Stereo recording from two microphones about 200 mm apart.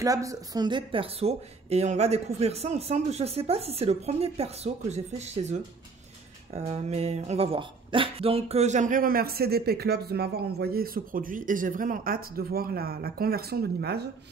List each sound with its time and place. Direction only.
0.0 s speech: 15° right (ahead or behind); by 14.0 s 55° right (ahead or behind)